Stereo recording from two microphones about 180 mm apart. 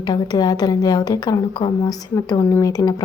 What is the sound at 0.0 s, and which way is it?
A woman's voice, 20° left (ahead or behind).